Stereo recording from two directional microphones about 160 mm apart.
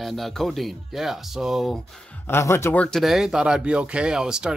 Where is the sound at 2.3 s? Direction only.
15° left (ahead or behind).